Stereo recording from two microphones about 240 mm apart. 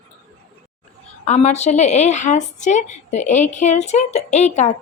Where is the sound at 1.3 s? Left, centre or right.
Left.